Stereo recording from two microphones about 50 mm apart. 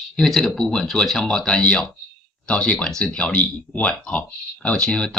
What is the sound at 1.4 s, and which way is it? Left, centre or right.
Speech, left.